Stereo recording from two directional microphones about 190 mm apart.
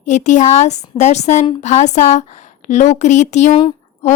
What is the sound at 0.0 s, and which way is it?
A woman's voice, 40° left (ahead or behind).